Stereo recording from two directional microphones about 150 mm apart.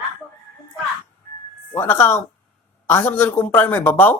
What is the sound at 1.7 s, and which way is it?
A woman's voice, 15° left (ahead or behind).